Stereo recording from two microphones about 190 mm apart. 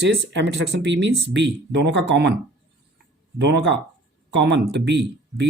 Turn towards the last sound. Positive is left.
turn(degrees=-65)  # may be behind; listen again after turning